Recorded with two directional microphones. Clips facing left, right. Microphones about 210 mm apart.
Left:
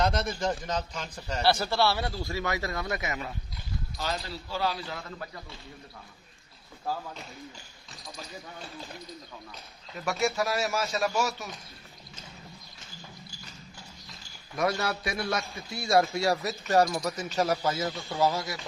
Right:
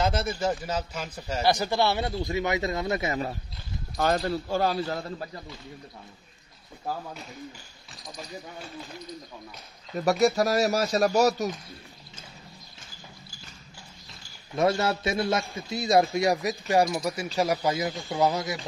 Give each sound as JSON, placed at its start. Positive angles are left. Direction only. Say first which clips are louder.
{"t": 0.0, "sound": "a man's voice", "louder": "right 1 dB", "side_deg": -5}
{"t": 3.9, "sound": "a man's voice", "louder": "right 10 dB", "side_deg": -50}
{"t": 9.9, "sound": "speech", "louder": "right 6 dB", "side_deg": -40}
{"t": 14.5, "sound": "a man's voice", "louder": "right 5 dB", "side_deg": -25}